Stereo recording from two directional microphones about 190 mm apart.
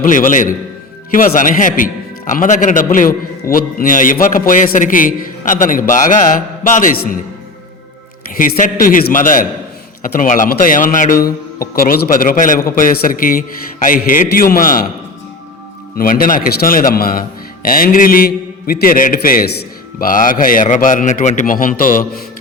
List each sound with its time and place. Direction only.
0.0 s a man's voice: 45° left (ahead or behind)
8.4 s a man's voice: 45° left (ahead or behind)
16.0 s a man's voice: 50° left (ahead or behind)